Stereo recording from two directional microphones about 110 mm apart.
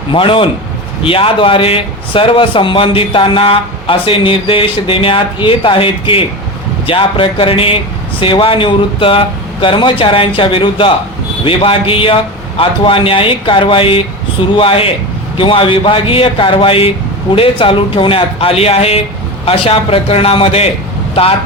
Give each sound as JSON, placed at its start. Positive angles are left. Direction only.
{"t": 0.1, "sound": "speech", "side_deg": 50}